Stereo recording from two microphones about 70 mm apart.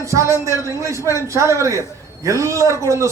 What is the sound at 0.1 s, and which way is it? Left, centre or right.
A man's voice, right.